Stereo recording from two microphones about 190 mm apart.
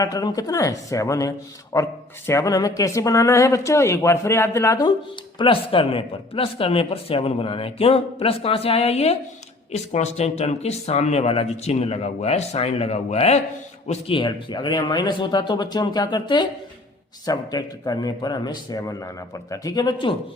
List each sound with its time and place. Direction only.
0.0 s a man's voice: 20° left (ahead or behind)